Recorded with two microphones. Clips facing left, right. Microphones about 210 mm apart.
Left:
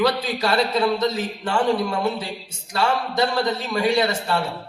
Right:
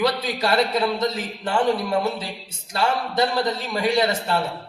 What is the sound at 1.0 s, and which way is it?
Speech, 25° left (ahead or behind).